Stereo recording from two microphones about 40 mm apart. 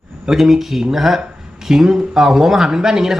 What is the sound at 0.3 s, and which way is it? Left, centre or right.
A man's voice, centre.